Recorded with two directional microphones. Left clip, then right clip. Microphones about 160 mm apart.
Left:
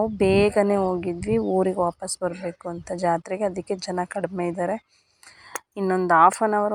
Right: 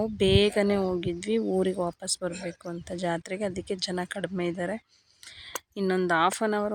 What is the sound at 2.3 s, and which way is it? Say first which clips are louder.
Speech: left 5 dB; 35° left (ahead or behind).